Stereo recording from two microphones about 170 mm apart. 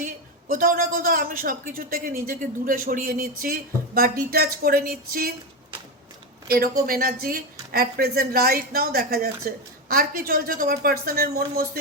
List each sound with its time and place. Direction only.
0.0 s a man's voice: 50° right (ahead or behind)
6.8 s a man's voice: 60° right (ahead or behind)